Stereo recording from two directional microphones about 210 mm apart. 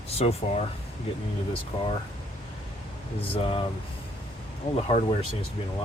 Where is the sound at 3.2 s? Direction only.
25° left (ahead or behind).